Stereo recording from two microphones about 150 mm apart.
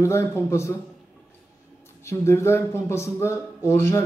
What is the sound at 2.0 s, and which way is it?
Speech, 20° left (ahead or behind).